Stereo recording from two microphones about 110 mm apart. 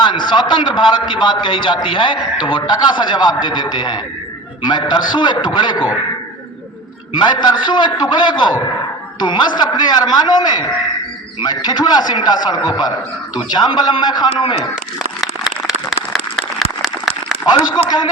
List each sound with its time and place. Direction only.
0.0 s a man's voice: 45° left (ahead or behind)
7.1 s a man's voice: 45° left (ahead or behind)
15.2 s a sound: centre (ahead or behind)